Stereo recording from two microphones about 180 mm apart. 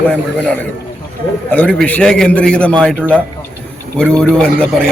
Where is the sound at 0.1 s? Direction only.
10° left (ahead or behind).